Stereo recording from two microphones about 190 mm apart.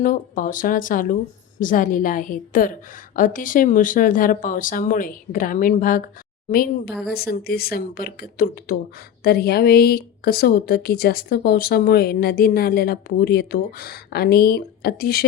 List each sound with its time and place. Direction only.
0.0 s speech: 45° left (ahead or behind)
7.1 s a woman's voice: 55° left (ahead or behind)